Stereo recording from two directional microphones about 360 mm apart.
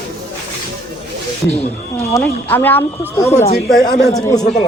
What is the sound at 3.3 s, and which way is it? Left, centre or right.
Speech, centre.